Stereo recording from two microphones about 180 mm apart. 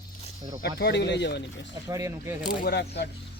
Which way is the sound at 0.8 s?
70° left (ahead or behind).